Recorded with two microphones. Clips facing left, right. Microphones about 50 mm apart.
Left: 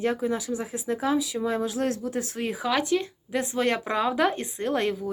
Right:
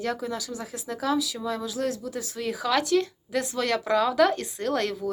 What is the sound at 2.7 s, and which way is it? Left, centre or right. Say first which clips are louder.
A woman's voice: right 2 dB; centre.